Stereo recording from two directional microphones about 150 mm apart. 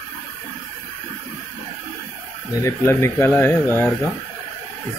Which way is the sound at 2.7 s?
15° left (ahead or behind).